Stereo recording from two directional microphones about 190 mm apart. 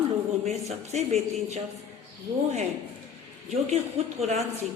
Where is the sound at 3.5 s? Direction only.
35° right (ahead or behind).